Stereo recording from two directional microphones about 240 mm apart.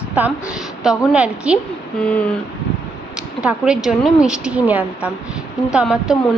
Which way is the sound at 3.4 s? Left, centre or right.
Centre.